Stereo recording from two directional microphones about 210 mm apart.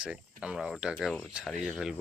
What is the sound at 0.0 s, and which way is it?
Speech, 5° right (ahead or behind).